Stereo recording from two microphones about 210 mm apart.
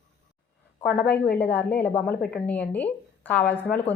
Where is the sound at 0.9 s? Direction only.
10° left (ahead or behind).